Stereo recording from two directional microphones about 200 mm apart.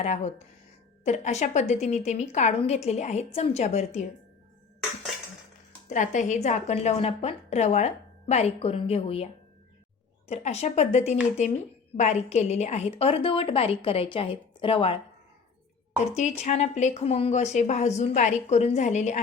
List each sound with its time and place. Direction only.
0.0 s a woman's voice: 35° left (ahead or behind)
5.9 s a woman's voice: 35° left (ahead or behind)
16.4 s a woman's voice: 35° left (ahead or behind)